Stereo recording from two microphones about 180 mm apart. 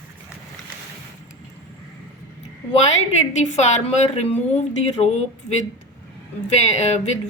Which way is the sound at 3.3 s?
40° left (ahead or behind).